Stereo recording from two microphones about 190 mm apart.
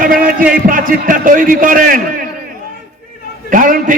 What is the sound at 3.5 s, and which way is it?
Speech, 45° right (ahead or behind).